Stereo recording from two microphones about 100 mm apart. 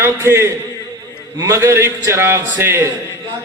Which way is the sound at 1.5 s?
30° right (ahead or behind).